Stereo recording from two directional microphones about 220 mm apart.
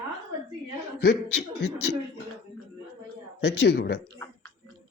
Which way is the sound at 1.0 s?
45° left (ahead or behind).